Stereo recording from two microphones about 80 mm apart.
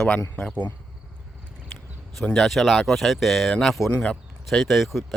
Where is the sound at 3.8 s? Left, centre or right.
Centre.